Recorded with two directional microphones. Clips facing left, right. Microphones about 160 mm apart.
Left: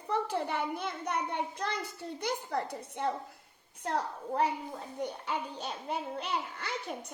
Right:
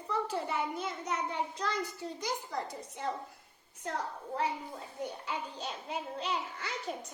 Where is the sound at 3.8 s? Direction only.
65° left (ahead or behind).